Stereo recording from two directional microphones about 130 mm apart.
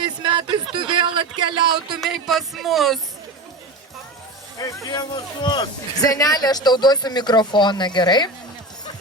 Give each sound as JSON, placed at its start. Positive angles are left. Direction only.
{"t": 0.0, "sound": "speech", "side_deg": -35}
{"t": 1.9, "sound": "speech", "side_deg": 0}
{"t": 4.5, "sound": "a man's voice", "side_deg": 25}